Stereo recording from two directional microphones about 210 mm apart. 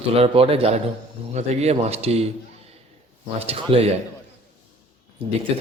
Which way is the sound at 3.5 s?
30° right (ahead or behind).